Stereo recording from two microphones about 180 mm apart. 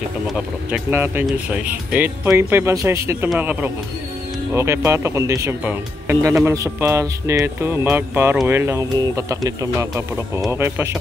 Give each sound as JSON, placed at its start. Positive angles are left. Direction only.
{"t": 0.3, "sound": "speech", "side_deg": -10}